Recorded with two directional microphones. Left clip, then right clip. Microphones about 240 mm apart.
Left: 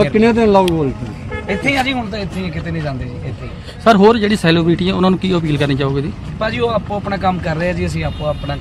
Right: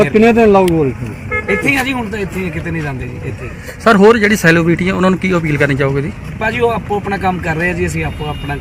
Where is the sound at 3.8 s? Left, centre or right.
Centre.